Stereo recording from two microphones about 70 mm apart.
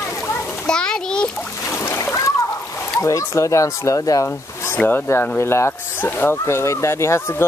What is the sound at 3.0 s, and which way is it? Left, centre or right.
Speech, left.